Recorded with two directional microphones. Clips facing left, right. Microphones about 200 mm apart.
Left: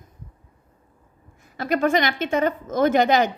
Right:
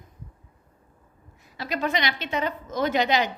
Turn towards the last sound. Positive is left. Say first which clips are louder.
# left 5 dB
turn(degrees=50)  # may be behind; listen again after turning